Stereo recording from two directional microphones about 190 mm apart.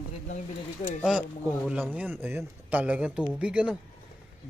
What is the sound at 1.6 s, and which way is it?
A man's voice, 10° right (ahead or behind).